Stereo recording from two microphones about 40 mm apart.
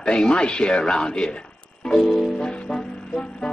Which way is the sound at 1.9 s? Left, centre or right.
Centre.